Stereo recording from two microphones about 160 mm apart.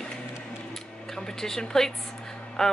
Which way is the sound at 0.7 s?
5° left (ahead or behind).